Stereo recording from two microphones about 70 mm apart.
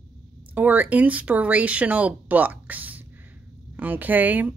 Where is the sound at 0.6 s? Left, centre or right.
Right.